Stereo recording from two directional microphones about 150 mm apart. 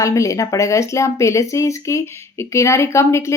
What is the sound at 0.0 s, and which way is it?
Speech, 20° left (ahead or behind).